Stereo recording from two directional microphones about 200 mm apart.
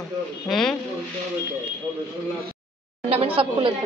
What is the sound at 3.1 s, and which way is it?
Speech, 30° right (ahead or behind).